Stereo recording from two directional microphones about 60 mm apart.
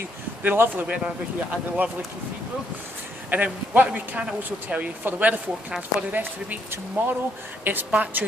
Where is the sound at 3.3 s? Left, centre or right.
Right.